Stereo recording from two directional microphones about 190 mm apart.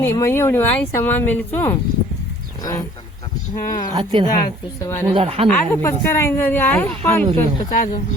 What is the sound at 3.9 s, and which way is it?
Speech, 20° right (ahead or behind).